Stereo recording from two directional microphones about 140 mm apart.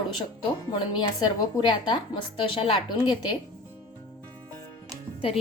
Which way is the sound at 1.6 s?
35° left (ahead or behind).